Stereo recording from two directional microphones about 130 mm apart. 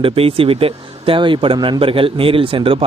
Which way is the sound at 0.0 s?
45° right (ahead or behind).